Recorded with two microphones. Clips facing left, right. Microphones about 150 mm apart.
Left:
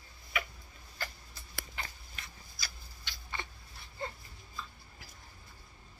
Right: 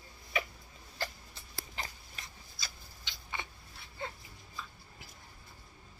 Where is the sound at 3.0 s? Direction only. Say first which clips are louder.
Even; 15° right (ahead or behind).